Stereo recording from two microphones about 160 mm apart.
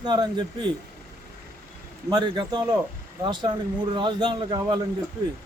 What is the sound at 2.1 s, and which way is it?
A man's voice, 25° right (ahead or behind).